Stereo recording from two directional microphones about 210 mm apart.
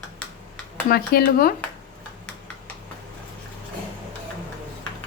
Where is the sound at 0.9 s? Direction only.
45° left (ahead or behind).